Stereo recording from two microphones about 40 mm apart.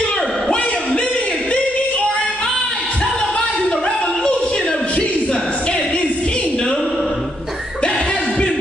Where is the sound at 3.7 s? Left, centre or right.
Left.